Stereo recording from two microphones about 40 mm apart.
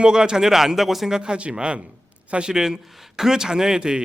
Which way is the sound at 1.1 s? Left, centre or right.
Centre.